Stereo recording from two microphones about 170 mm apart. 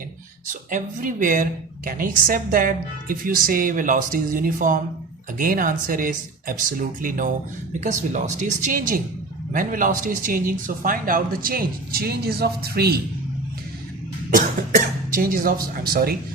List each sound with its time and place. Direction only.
0.7 s a woman's voice: 50° right (ahead or behind); by 13.0 s 70° right (ahead or behind)
15.1 s a woman's voice: 55° right (ahead or behind)